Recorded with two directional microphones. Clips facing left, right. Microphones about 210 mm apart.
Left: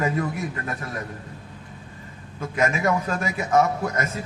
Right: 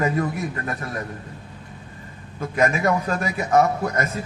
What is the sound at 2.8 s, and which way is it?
Speech, 35° right (ahead or behind).